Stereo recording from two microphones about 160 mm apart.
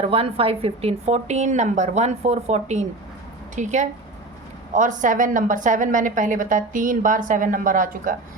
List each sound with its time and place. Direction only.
0.0 s a woman's voice: 35° right (ahead or behind); by 8.1 s 55° right (ahead or behind)